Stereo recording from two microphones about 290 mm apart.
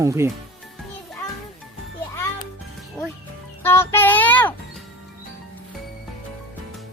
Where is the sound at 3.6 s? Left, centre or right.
Centre.